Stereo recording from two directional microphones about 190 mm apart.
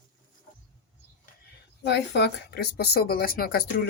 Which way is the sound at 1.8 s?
60° left (ahead or behind).